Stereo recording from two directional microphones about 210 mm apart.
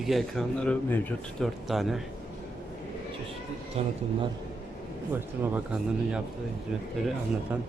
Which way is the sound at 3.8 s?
30° right (ahead or behind).